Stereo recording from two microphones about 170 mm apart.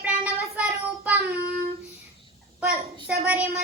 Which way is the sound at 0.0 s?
10° right (ahead or behind).